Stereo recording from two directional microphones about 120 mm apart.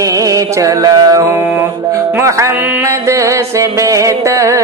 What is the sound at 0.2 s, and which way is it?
Music, 30° right (ahead or behind).